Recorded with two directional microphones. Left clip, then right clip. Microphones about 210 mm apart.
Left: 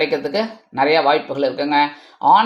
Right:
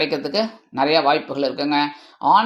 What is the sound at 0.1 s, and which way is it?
Speech, 30° right (ahead or behind).